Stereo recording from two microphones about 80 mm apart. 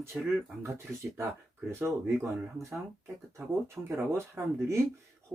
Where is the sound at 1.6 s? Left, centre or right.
Right.